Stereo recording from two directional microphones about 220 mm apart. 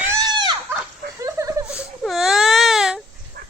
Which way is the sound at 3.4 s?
40° right (ahead or behind).